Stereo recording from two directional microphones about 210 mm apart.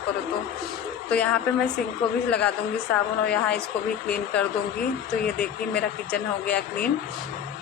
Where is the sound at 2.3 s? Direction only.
5° left (ahead or behind).